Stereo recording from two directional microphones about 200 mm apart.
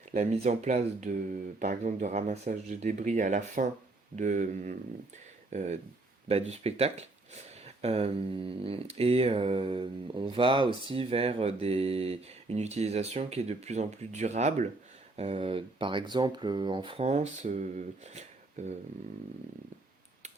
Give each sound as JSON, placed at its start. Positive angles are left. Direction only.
{"t": 0.1, "sound": "speech", "side_deg": -35}